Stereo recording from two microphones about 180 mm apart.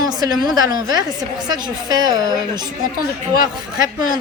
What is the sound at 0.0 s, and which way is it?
A woman's voice, 20° right (ahead or behind).